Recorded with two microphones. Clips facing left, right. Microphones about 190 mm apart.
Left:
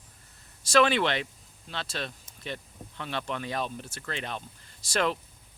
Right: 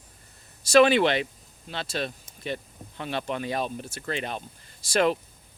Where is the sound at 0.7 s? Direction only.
10° right (ahead or behind).